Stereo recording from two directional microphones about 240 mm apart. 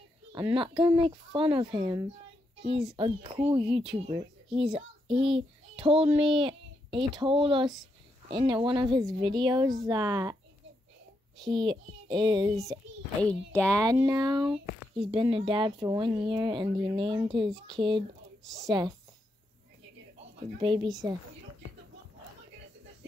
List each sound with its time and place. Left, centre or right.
0.3 s a child's voice: centre
11.3 s a child's voice: centre
11.6 s a child's voice: centre
13.2 s speech: centre
13.7 s a child's voice: centre
20.5 s speech: centre